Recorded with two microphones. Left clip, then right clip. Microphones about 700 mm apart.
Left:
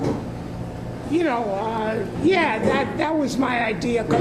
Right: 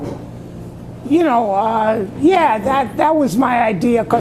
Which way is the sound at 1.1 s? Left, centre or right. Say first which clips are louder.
Right 8 dB; right.